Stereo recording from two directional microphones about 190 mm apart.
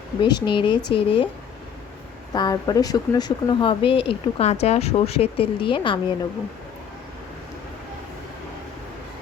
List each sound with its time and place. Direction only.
0.2 s speech: 25° left (ahead or behind)
2.3 s speech: 20° left (ahead or behind)